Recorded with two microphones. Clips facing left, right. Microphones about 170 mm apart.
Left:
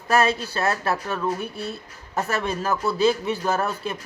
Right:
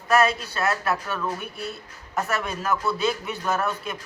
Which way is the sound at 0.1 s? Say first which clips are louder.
Even; 30° left (ahead or behind).